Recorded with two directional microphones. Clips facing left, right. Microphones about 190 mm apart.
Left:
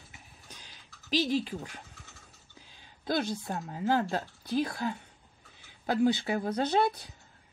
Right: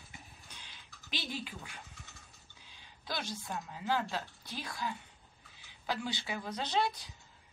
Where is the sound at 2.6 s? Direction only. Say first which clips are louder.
Left 10 dB; 45° left (ahead or behind).